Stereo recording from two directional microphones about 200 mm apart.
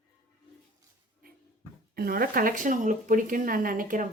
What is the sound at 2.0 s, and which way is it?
Speech, 50° right (ahead or behind).